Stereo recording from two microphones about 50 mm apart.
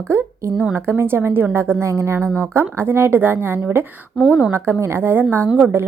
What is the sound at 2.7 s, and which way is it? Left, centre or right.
A woman's voice, right.